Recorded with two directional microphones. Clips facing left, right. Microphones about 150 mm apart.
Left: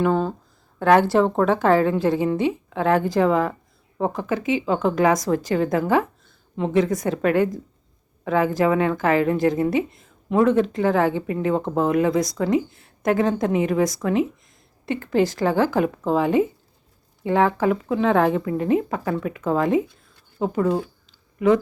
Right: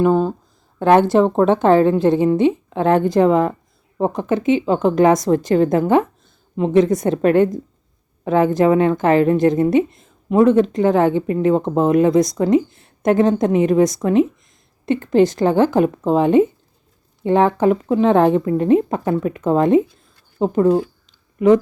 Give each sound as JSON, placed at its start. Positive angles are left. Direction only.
{"t": 0.0, "sound": "a woman's voice", "side_deg": -15}